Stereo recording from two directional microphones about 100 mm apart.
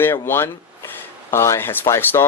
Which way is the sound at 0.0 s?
25° left (ahead or behind).